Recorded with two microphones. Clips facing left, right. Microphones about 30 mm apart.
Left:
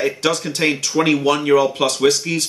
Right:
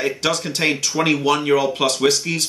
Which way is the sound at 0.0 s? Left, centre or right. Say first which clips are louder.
Left 2 dB; centre.